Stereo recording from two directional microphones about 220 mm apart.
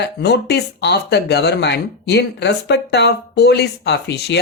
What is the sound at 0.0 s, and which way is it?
Speech, 50° left (ahead or behind).